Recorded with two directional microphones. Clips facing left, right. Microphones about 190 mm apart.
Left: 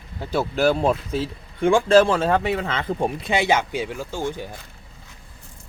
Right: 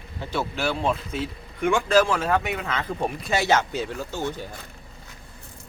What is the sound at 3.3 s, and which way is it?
Speech, 15° left (ahead or behind).